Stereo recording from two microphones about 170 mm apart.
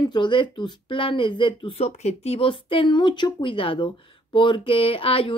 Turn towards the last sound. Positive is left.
turn(degrees=35)  # may be behind; listen again after turning